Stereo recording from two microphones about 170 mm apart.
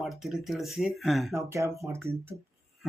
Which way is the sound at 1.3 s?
15° right (ahead or behind).